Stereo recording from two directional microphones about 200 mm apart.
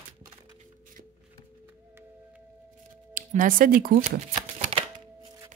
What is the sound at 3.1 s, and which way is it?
Shuffling cards, 40° right (ahead or behind).